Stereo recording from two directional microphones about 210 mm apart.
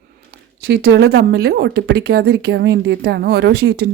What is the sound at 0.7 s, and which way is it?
Speech, 55° right (ahead or behind).